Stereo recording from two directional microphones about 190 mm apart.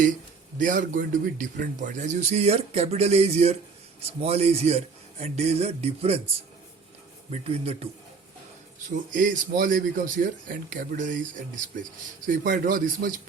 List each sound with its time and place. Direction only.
0.6 s a man's voice: 45° right (ahead or behind)
7.3 s a man's voice: 30° right (ahead or behind)
9.1 s speech: 45° right (ahead or behind)